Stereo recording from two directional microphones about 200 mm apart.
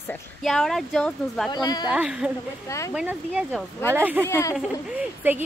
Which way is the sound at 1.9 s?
5° right (ahead or behind).